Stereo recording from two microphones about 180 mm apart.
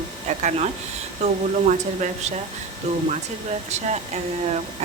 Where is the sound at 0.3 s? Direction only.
40° right (ahead or behind).